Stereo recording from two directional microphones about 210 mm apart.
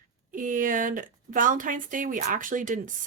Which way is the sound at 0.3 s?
40° right (ahead or behind).